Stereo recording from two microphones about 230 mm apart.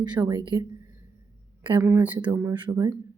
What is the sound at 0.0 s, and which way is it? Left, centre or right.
Speech, centre.